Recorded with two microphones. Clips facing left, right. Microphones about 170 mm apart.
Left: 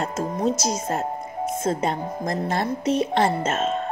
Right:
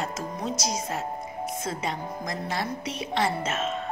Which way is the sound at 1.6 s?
50° left (ahead or behind).